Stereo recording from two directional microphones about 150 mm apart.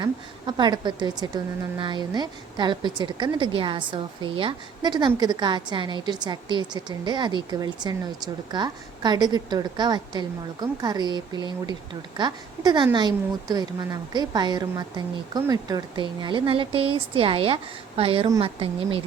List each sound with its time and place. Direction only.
0.0 s a woman's voice: 30° right (ahead or behind)